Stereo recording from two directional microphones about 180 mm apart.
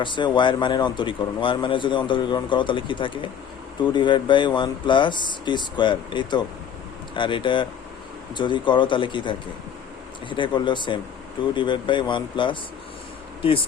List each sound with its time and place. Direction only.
0.0 s speech: 25° left (ahead or behind)